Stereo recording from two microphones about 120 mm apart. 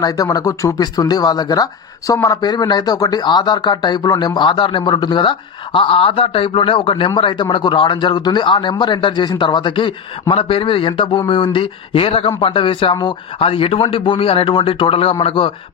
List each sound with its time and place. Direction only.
0.0 s speech: 30° left (ahead or behind); by 15.5 s 50° left (ahead or behind)